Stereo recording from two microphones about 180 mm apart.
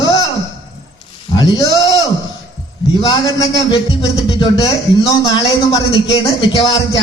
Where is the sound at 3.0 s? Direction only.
20° left (ahead or behind).